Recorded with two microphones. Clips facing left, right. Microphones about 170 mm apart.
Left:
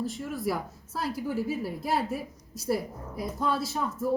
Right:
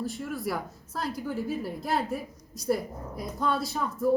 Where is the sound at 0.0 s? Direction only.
Centre (ahead or behind).